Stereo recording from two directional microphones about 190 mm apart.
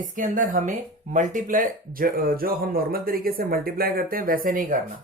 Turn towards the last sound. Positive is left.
turn(degrees=-45)  # may be behind; listen again after turning